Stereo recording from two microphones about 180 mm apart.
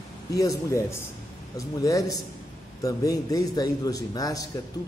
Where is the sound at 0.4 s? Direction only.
15° left (ahead or behind).